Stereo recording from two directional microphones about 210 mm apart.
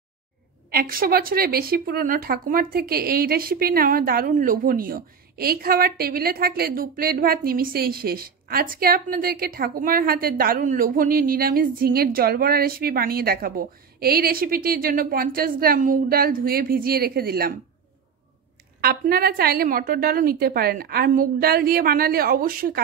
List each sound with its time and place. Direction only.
0.7 s a woman's voice: 45° right (ahead or behind)
18.8 s a woman's voice: 45° right (ahead or behind)